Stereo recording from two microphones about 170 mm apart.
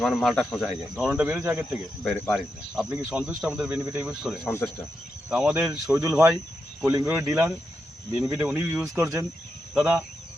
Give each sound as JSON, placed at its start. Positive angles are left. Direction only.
{"t": 0.0, "sound": "speech", "side_deg": 0}
{"t": 0.9, "sound": "speech", "side_deg": -10}
{"t": 2.0, "sound": "speech", "side_deg": 10}
{"t": 2.3, "sound": "speech", "side_deg": -5}
{"t": 4.4, "sound": "speech", "side_deg": 10}
{"t": 5.3, "sound": "speech", "side_deg": -5}
{"t": 5.9, "sound": "speech", "side_deg": -15}